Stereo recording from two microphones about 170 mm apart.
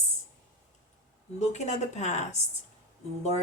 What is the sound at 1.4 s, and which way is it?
Speech, 40° left (ahead or behind).